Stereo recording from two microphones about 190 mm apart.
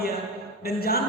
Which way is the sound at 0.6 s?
55° left (ahead or behind).